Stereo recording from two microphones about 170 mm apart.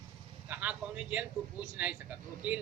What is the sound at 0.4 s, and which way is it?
A woman's voice, 10° right (ahead or behind).